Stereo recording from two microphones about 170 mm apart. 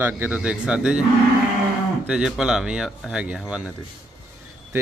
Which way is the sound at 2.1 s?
5° right (ahead or behind).